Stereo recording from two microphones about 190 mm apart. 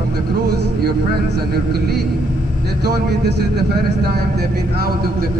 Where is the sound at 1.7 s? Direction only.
55° right (ahead or behind).